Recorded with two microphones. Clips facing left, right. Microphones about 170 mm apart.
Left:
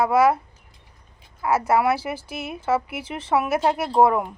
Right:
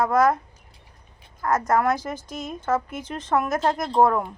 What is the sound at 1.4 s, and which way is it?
Speech, 10° left (ahead or behind).